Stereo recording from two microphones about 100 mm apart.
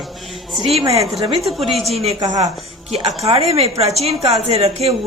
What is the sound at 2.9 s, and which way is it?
A woman's voice, 85° right.